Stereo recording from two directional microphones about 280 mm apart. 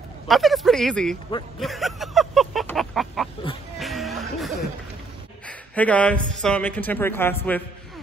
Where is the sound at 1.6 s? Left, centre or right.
Centre.